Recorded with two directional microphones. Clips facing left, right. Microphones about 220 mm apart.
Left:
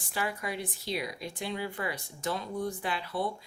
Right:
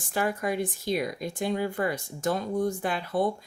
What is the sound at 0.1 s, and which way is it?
Speech, 45° right (ahead or behind).